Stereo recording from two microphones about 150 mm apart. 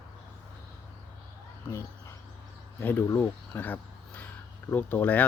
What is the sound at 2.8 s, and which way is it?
Speech, 15° left (ahead or behind).